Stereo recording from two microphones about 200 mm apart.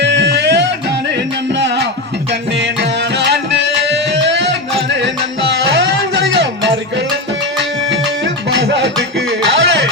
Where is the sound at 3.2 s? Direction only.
60° right (ahead or behind).